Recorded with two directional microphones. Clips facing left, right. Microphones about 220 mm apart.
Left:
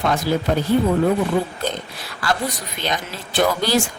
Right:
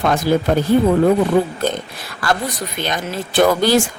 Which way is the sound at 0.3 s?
50° right (ahead or behind).